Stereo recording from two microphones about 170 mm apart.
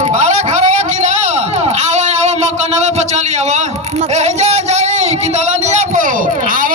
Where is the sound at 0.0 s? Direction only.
45° right (ahead or behind).